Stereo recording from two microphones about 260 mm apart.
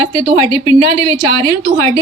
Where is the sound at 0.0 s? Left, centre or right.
Centre.